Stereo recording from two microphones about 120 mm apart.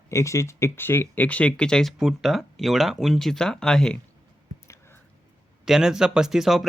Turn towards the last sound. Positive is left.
turn(degrees=0)  # may be behind; listen again after turning